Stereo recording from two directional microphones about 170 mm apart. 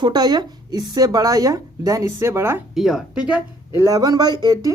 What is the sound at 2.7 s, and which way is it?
Speech, centre (ahead or behind).